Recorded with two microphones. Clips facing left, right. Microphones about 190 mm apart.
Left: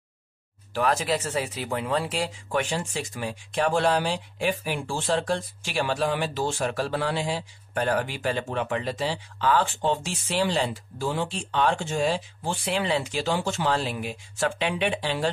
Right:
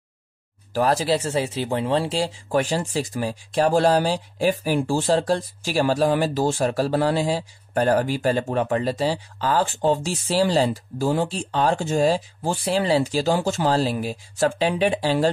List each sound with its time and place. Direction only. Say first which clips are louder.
0.7 s speech: right 4 dB; 35° right (ahead or behind)